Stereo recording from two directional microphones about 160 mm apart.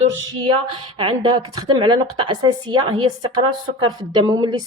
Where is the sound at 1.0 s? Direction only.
30° right (ahead or behind).